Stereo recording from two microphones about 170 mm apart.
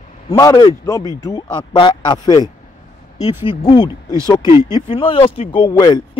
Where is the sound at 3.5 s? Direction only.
25° left (ahead or behind).